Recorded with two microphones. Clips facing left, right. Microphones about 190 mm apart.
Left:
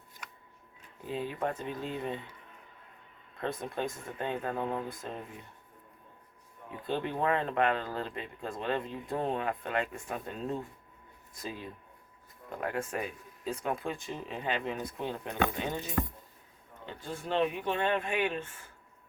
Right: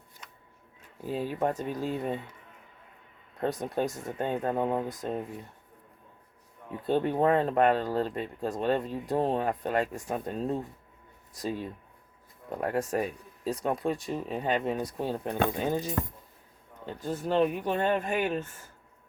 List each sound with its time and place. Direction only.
1.0 s speech: 40° right (ahead or behind)
3.6 s speech: 40° right (ahead or behind)
6.8 s speech: 40° right (ahead or behind)